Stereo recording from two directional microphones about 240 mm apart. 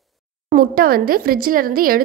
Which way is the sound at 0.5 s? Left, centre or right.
Right.